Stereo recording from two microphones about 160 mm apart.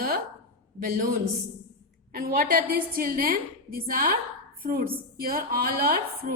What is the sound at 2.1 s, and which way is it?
A woman's voice, 65° right (ahead or behind).